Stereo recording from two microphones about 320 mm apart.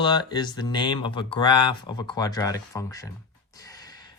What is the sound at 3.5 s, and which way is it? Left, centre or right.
Gasp, centre.